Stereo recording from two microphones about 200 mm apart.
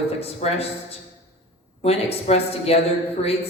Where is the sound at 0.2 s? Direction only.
30° left (ahead or behind).